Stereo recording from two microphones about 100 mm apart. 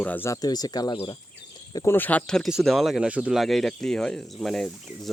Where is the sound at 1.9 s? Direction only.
20° left (ahead or behind).